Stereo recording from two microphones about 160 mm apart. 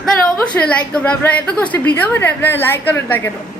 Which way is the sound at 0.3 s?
10° left (ahead or behind).